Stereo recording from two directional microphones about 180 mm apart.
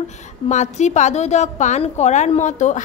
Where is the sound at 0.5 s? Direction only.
40° left (ahead or behind).